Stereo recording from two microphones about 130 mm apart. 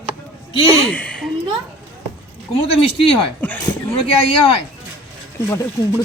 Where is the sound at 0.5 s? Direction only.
45° left (ahead or behind).